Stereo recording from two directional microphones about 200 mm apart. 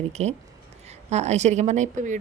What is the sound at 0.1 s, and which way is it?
Speech, 35° right (ahead or behind).